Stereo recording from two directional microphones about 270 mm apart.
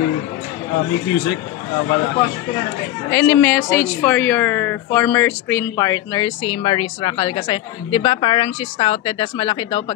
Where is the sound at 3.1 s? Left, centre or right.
Centre.